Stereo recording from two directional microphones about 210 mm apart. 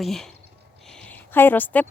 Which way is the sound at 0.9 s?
5° left (ahead or behind).